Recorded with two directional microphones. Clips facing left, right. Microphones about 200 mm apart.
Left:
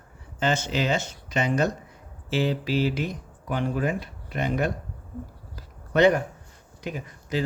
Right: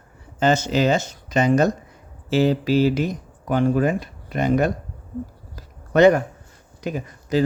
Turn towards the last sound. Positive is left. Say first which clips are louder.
# right 7 dB
turn(degrees=-40)  # may be behind; listen again after turning